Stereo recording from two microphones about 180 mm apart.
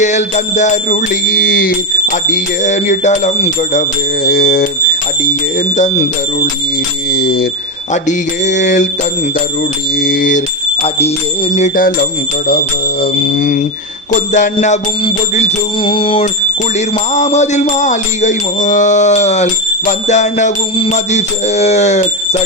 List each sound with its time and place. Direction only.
0.0 s music: 40° left (ahead or behind)
4.3 s music: 55° left (ahead or behind)
5.2 s music: 45° left (ahead or behind)
7.1 s music: 55° left (ahead or behind)
8.0 s music: 40° left (ahead or behind)
10.0 s a sound: 50° left (ahead or behind)
10.8 s music: 35° left (ahead or behind)
12.5 s music: 55° left (ahead or behind); by 22.4 s 40° left (ahead or behind)